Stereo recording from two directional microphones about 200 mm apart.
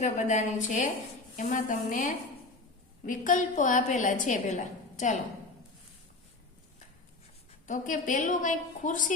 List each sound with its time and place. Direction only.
0.0 s a woman's voice: 35° left (ahead or behind)
7.7 s a woman's voice: 40° left (ahead or behind)